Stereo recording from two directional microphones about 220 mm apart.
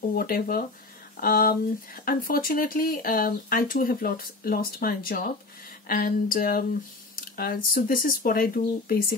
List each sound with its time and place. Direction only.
0.1 s speech: 40° left (ahead or behind)